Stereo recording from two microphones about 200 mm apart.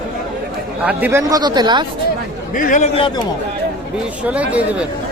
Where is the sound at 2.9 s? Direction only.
25° left (ahead or behind).